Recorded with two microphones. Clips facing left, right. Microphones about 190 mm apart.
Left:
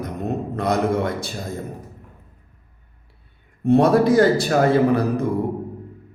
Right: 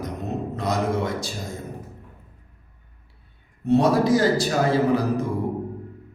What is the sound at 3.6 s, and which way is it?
A man's voice, 55° left (ahead or behind).